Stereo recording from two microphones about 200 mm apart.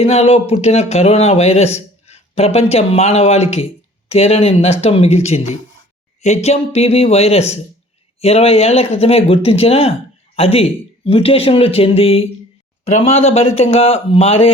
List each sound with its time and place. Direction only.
0.0 s speech: 30° left (ahead or behind)